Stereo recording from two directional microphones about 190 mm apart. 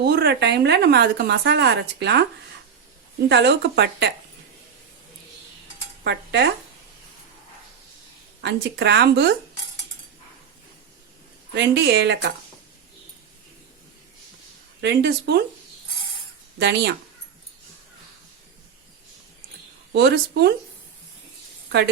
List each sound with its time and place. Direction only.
0.0 s a woman's voice: 60° right (ahead or behind)
3.2 s a woman's voice: 65° right (ahead or behind)
6.1 s a woman's voice: 60° right (ahead or behind)
8.4 s a woman's voice: 65° right (ahead or behind)
11.5 s a woman's voice: 65° right (ahead or behind)
14.8 s a woman's voice: 60° right (ahead or behind)
16.6 s a woman's voice: 60° right (ahead or behind)
19.9 s a woman's voice: 60° right (ahead or behind)